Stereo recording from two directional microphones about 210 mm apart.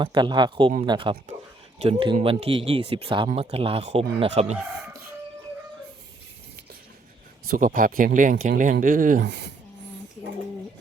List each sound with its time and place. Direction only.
0.0 s speech: 20° right (ahead or behind)
7.4 s speech: 40° right (ahead or behind)
9.2 s speech: 55° right (ahead or behind)